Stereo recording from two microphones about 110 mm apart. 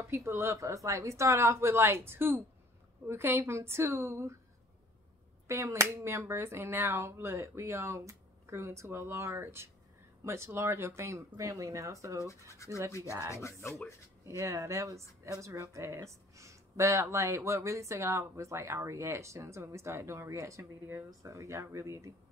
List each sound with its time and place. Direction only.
0.0 s speech: 25° right (ahead or behind)
5.5 s speech: 25° right (ahead or behind)
12.6 s speech: 30° left (ahead or behind)
13.0 s speech: 30° right (ahead or behind)
13.3 s speech: 25° left (ahead or behind)
14.2 s speech: 25° right (ahead or behind)